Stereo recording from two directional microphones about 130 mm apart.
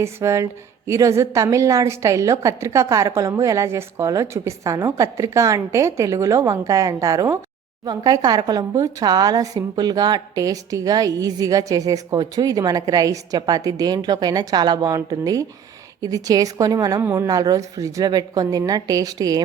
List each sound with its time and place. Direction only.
0.0 s a woman's voice: 20° right (ahead or behind)